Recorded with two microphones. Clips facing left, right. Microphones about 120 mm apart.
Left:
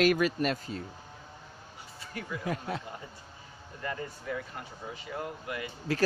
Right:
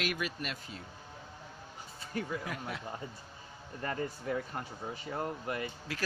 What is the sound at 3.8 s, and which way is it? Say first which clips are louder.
Speech: right 1 dB; 35° right (ahead or behind).